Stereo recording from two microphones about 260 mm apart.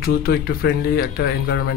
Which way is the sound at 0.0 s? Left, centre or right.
Left.